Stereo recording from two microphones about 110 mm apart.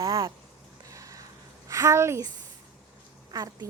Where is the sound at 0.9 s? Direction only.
30° right (ahead or behind).